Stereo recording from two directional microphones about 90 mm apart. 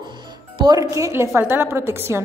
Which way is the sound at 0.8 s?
35° right (ahead or behind).